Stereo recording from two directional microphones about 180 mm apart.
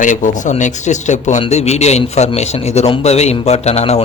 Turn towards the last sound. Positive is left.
turn(degrees=35)  # may be behind; listen again after turning